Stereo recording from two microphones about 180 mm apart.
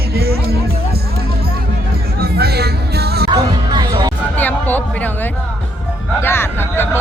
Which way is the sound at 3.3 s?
25° right (ahead or behind).